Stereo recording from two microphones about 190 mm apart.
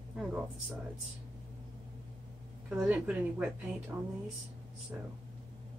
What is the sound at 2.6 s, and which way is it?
Speech, 5° right (ahead or behind).